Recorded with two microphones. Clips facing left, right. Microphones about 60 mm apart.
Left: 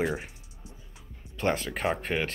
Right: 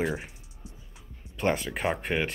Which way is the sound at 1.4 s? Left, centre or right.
Centre.